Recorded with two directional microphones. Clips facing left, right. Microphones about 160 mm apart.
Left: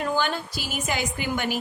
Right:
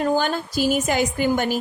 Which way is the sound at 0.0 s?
40° right (ahead or behind).